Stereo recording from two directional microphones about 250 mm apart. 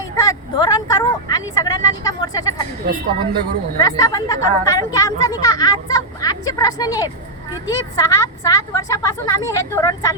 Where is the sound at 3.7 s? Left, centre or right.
Centre.